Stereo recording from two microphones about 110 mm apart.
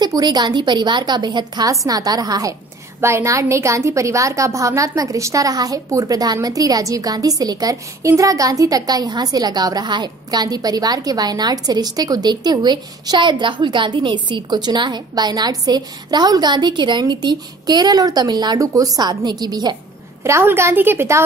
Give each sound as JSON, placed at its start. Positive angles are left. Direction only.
{"t": 0.0, "sound": "a woman's voice", "side_deg": -40}
{"t": 3.0, "sound": "a woman's voice", "side_deg": -25}
{"t": 20.2, "sound": "a woman's voice", "side_deg": -25}